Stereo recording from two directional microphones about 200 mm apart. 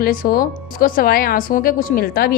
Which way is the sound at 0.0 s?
45° left (ahead or behind).